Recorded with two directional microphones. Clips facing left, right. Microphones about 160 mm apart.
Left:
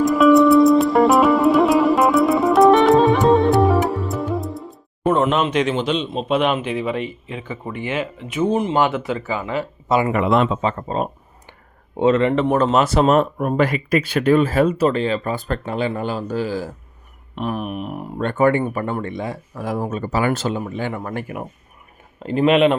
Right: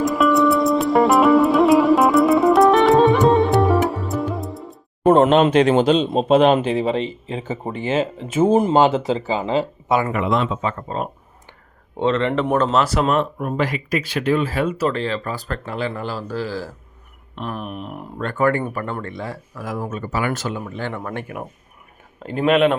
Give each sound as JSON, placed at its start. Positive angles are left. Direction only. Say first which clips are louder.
{"t": 0.0, "sound": "music", "louder": "left 4 dB", "side_deg": 0}
{"t": 5.0, "sound": "speech", "louder": "right 5 dB", "side_deg": -40}
{"t": 8.3, "sound": "speech", "louder": "right 4 dB", "side_deg": -40}
{"t": 8.7, "sound": "speech", "louder": "right 3 dB", "side_deg": -30}
{"t": 10.6, "sound": "speech", "louder": "left 3 dB", "side_deg": 20}
{"t": 11.9, "sound": "speech", "louder": "left 3 dB", "side_deg": 5}
{"t": 12.7, "sound": "speech", "louder": "left 2 dB", "side_deg": 25}
{"t": 13.1, "sound": "speech", "louder": "left 4 dB", "side_deg": 50}
{"t": 14.8, "sound": "speech", "louder": "left 3 dB", "side_deg": 20}
{"t": 18.2, "sound": "speech", "louder": "left 3 dB", "side_deg": 25}
{"t": 20.6, "sound": "speech", "louder": "left 2 dB", "side_deg": 15}